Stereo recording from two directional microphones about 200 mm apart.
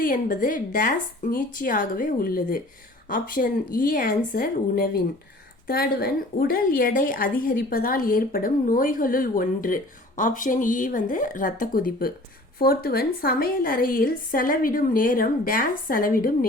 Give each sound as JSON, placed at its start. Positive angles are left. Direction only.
{"t": 0.0, "sound": "a woman's voice", "side_deg": 45}